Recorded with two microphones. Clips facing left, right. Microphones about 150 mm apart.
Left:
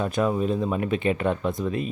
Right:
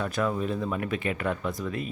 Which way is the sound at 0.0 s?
20° left (ahead or behind).